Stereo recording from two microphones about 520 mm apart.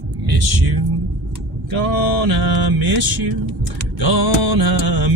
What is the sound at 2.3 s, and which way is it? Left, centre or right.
Mantra, right.